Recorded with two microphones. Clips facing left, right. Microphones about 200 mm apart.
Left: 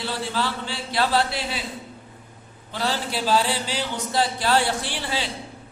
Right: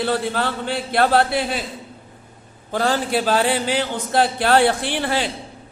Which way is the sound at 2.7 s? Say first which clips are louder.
Right 7 dB; 50° right (ahead or behind).